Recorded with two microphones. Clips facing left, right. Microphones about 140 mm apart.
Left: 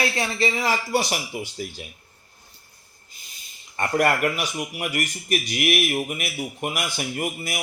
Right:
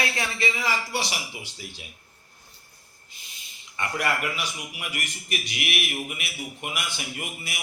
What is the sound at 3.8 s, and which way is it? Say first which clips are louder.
Speech: left 7 dB; 50° left (ahead or behind).